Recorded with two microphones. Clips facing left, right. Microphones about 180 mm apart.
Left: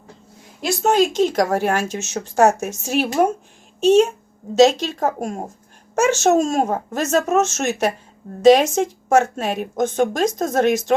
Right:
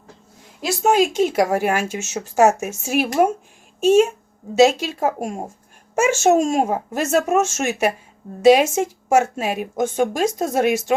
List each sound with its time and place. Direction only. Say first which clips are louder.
0.6 s a woman's voice: even; 10° right (ahead or behind)